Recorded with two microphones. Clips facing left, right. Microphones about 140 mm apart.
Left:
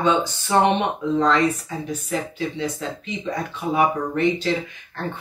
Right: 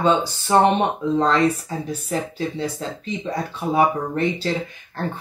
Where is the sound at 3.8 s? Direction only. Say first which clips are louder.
Right 1 dB; 35° right (ahead or behind).